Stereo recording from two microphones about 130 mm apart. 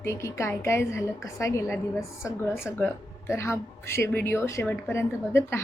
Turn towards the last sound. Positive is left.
turn(degrees=20)  # may be behind; listen again after turning